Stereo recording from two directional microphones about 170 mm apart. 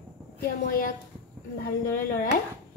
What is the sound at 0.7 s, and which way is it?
A woman's voice, 55° left (ahead or behind).